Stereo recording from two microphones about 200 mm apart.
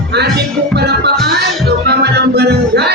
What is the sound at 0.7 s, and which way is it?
Music, 55° right (ahead or behind).